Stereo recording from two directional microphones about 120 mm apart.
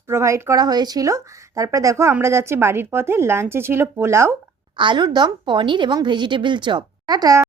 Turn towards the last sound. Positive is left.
turn(degrees=-35)  # may be behind; listen again after turning